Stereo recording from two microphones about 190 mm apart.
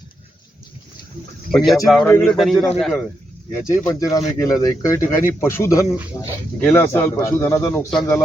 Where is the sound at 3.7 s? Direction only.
15° left (ahead or behind).